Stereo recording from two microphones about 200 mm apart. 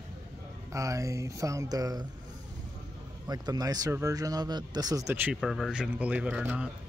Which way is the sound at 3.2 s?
20° right (ahead or behind).